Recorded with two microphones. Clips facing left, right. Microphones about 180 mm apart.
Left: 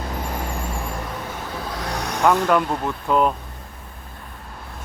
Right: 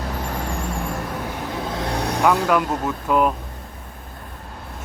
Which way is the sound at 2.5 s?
5° right (ahead or behind).